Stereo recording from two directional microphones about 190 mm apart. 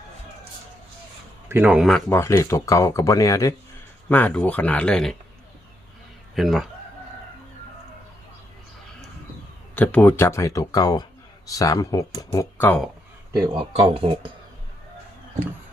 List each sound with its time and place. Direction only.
1.5 s a man's voice: 10° right (ahead or behind)
2.0 s speech: 15° left (ahead or behind)
6.3 s a man's voice: centre (ahead or behind)
9.7 s speech: 10° left (ahead or behind)
13.3 s speech: 20° right (ahead or behind)